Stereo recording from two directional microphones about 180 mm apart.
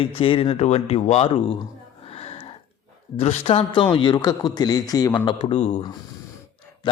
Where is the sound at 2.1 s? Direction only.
35° left (ahead or behind).